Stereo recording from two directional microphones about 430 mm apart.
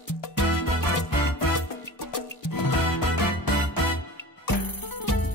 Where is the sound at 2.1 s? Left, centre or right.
Left.